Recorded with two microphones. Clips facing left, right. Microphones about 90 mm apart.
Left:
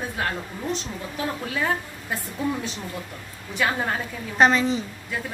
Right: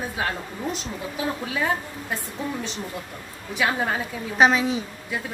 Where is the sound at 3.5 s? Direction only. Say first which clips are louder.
Right 1 dB; 5° right (ahead or behind).